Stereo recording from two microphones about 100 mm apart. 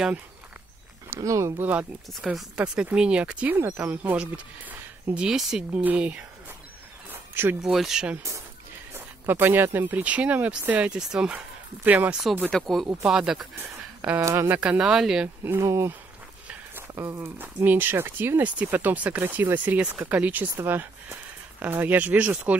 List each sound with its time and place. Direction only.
1.2 s speech: 35° right (ahead or behind)
1.6 s speech: 15° right (ahead or behind)
5.1 s speech: 5° right (ahead or behind)
7.1 s a sound: 20° right (ahead or behind)
7.6 s speech: 5° right (ahead or behind)
8.9 s speech: 20° right (ahead or behind)
12.4 s speech: 5° left (ahead or behind)
13.6 s a sound: 15° right (ahead or behind)
14.2 s speech: 25° right (ahead or behind)
14.6 s speech: 10° right (ahead or behind)
15.4 s speech: 30° right (ahead or behind)
16.9 s speech: 25° right (ahead or behind)